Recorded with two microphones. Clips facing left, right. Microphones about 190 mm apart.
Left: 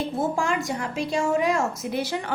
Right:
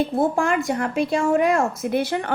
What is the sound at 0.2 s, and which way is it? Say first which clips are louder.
A woman's voice: right 3 dB; 55° right (ahead or behind).